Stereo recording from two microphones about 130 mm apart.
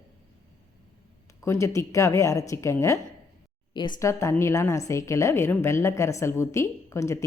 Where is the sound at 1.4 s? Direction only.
20° left (ahead or behind).